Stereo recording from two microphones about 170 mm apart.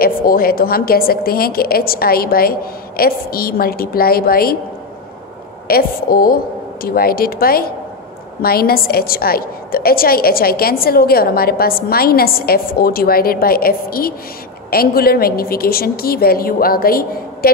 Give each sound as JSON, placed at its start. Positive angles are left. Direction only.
{"t": 0.0, "sound": "a woman's voice", "side_deg": 60}
{"t": 5.7, "sound": "a woman's voice", "side_deg": 60}